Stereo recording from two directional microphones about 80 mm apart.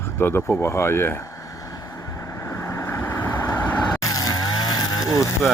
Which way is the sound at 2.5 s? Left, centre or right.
Left.